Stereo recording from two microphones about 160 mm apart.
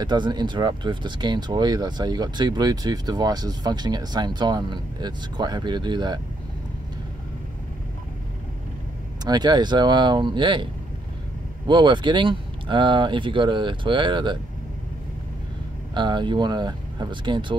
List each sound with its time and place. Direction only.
0.0 s speech: 30° right (ahead or behind)
9.2 s speech: 25° right (ahead or behind)
15.9 s speech: 30° right (ahead or behind)